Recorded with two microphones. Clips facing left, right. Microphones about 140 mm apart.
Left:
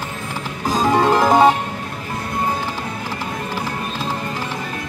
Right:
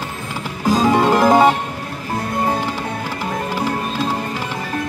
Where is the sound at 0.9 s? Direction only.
15° right (ahead or behind).